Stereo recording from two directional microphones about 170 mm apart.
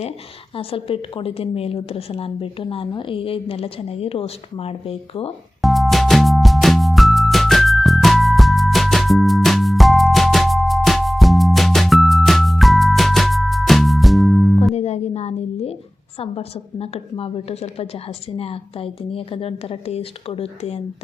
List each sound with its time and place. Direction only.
0.5 s a woman's voice: 35° left (ahead or behind)
5.6 s music: centre (ahead or behind)
14.8 s a sound: 40° left (ahead or behind)
16.2 s a woman's voice: 35° left (ahead or behind)